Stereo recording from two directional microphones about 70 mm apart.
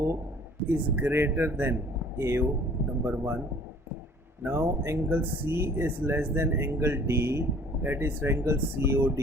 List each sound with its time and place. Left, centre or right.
0.7 s speech: right
4.4 s speech: right